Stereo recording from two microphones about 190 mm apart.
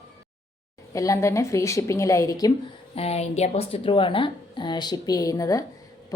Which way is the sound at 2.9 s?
35° left (ahead or behind).